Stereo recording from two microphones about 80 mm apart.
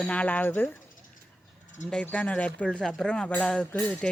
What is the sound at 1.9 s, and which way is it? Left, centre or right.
Speech, centre.